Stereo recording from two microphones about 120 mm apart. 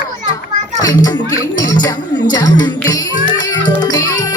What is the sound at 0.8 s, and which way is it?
Speech, 30° left (ahead or behind).